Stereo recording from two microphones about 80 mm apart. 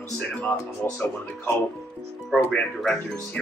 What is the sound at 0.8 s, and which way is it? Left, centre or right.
Speech, left.